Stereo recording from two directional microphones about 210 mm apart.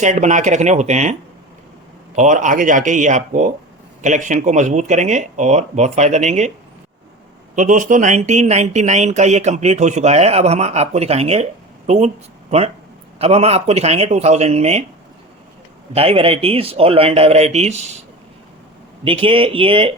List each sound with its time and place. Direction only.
0.0 s speech: 35° right (ahead or behind)
2.1 s speech: 35° right (ahead or behind)
7.5 s speech: 35° right (ahead or behind)
16.0 s speech: 25° right (ahead or behind)
19.0 s speech: 25° right (ahead or behind)